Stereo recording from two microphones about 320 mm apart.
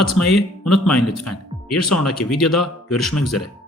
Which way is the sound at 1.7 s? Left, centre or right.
Left.